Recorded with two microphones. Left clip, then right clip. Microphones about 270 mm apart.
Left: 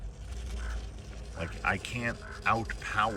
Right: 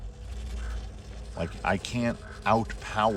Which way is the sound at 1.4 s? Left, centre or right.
Centre.